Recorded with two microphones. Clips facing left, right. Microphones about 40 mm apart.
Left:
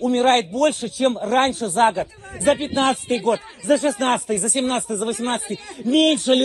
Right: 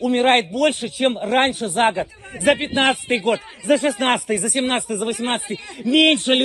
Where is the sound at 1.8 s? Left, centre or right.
Right.